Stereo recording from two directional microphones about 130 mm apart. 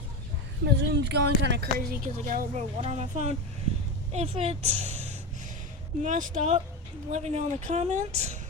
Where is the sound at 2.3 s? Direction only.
75° right (ahead or behind).